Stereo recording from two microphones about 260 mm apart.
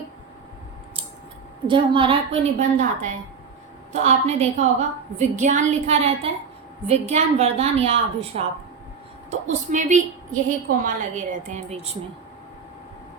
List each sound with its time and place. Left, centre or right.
1.6 s a woman's voice: centre